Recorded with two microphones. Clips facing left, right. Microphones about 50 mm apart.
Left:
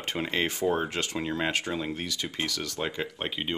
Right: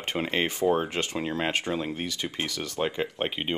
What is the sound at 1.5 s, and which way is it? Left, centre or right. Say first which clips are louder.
Speech: right 1 dB; right.